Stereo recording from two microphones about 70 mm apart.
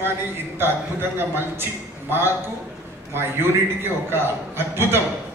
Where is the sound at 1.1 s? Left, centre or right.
Right.